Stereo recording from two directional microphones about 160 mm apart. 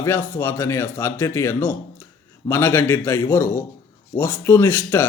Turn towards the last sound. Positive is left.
turn(degrees=15)  # may be behind; listen again after turning